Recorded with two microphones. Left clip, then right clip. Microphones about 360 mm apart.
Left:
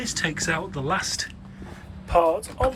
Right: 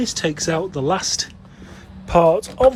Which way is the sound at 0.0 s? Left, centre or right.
Centre.